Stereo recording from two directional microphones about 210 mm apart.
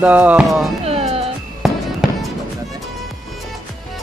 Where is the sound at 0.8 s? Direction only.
30° right (ahead or behind).